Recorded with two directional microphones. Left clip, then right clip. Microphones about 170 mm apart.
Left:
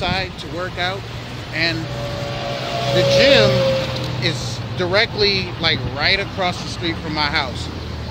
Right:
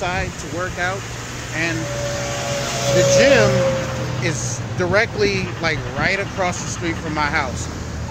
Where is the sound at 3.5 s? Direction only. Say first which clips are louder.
Left 1 dB; 40° left (ahead or behind).